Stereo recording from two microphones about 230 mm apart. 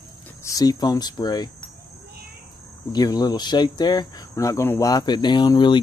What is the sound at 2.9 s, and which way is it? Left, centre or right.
Speech, centre.